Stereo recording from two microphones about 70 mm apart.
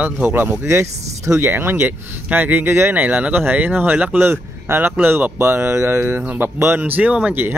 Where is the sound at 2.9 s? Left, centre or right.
Right.